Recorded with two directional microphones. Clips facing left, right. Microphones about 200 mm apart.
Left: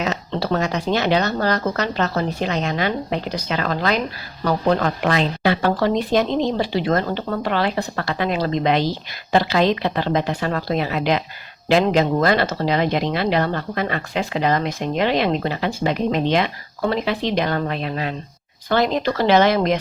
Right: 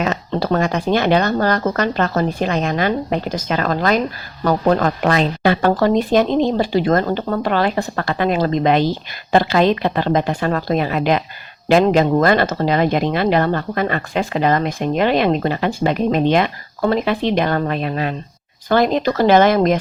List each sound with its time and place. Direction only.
0.0 s speech: 50° right (ahead or behind)